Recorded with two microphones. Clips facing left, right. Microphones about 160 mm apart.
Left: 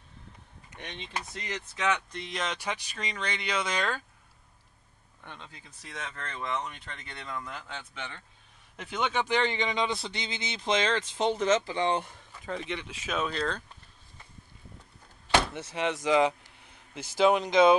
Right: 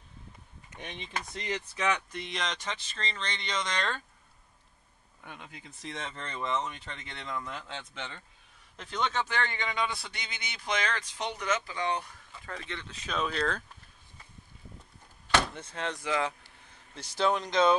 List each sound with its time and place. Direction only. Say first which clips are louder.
0.7 s speech: even; 10° right (ahead or behind)
2.1 s speech: left 1 dB; centre (ahead or behind)
5.2 s speech: right 1 dB; 10° right (ahead or behind)
7.2 s speech: right 1 dB; 5° left (ahead or behind)
8.7 s a man's voice: left 2 dB; 5° left (ahead or behind)
15.3 s door: left 2 dB; 10° left (ahead or behind)
16.0 s vehicle: left 8 dB; 15° left (ahead or behind)
17.2 s speech: left 5 dB; 10° left (ahead or behind)